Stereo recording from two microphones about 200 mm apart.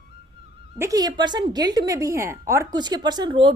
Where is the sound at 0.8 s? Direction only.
15° right (ahead or behind).